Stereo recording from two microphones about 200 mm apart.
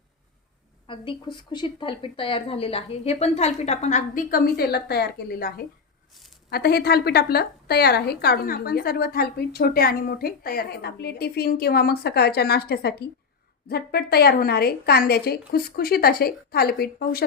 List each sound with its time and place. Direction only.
0.9 s a woman's voice: 25° left (ahead or behind); by 17.2 s 50° left (ahead or behind)